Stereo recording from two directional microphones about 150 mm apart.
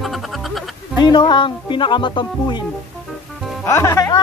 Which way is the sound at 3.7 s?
20° left (ahead or behind).